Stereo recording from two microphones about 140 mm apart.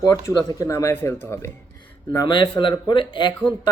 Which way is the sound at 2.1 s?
30° left (ahead or behind).